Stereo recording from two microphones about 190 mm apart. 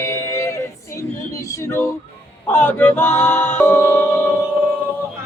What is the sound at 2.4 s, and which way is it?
Music, 10° left (ahead or behind).